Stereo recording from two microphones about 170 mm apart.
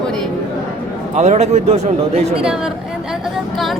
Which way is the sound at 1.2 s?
40° right (ahead or behind).